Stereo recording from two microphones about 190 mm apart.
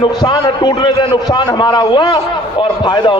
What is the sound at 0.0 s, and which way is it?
A man's voice, 20° left (ahead or behind).